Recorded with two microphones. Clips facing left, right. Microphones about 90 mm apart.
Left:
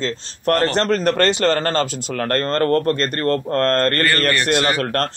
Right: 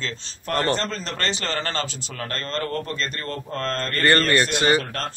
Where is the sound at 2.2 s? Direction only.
60° left (ahead or behind).